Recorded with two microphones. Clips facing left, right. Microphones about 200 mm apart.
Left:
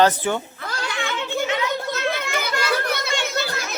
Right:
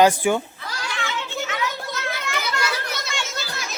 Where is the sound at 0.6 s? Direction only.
55° left (ahead or behind).